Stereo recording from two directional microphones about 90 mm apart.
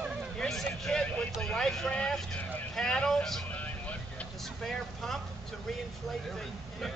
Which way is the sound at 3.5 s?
15° left (ahead or behind).